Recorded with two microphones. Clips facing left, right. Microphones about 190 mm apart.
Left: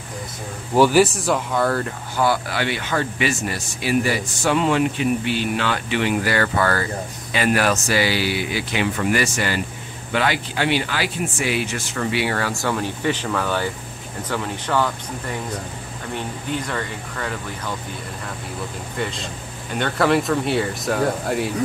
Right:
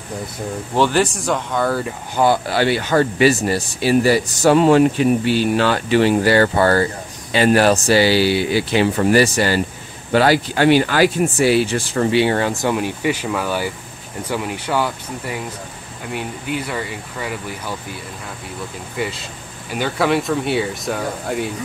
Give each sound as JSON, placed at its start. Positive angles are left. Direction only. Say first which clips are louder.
{"t": 0.7, "sound": "speech", "louder": "left 2 dB", "side_deg": 10}
{"t": 2.1, "sound": "speech", "louder": "right 5 dB", "side_deg": -25}
{"t": 18.9, "sound": "speech", "louder": "right 2 dB", "side_deg": -5}